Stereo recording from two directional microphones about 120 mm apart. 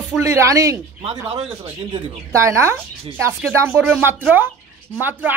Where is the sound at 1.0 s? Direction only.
50° right (ahead or behind).